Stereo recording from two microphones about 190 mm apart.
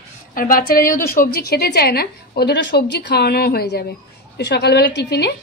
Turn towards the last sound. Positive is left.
turn(degrees=60)  # may be behind; listen again after turning